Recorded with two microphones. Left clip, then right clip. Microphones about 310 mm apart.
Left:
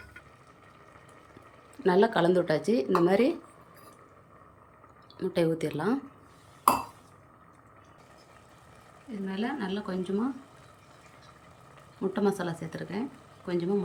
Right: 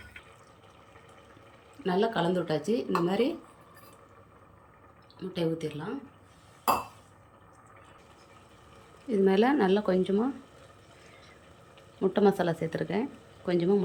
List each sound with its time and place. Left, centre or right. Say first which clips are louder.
1.8 s speech: left 4 dB; centre
5.1 s speech: left 4 dB; centre
9.2 s speech: right 10 dB; centre
11.9 s speech: right 4 dB; centre